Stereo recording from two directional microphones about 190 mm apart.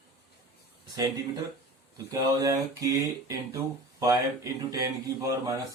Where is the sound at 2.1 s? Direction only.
20° right (ahead or behind).